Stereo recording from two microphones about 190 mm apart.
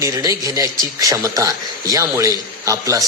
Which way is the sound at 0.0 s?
15° right (ahead or behind).